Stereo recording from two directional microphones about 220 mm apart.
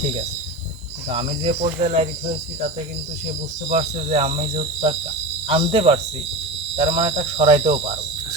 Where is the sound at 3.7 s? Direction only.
30° right (ahead or behind).